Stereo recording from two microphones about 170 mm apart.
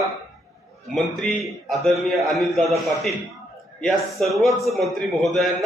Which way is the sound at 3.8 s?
Centre (ahead or behind).